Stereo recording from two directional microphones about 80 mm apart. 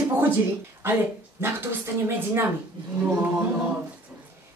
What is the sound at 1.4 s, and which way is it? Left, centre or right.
A woman's voice, right.